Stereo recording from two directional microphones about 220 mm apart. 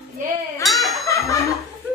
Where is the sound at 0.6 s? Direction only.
Centre (ahead or behind).